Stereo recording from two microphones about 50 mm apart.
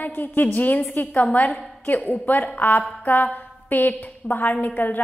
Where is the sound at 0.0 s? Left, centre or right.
Left.